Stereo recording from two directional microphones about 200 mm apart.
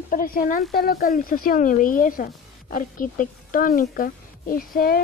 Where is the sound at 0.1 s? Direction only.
45° left (ahead or behind).